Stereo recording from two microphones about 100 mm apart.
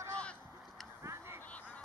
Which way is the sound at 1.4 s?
15° left (ahead or behind).